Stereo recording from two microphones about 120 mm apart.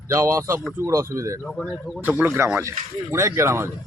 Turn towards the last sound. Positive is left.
turn(degrees=-20)  # may be behind; listen again after turning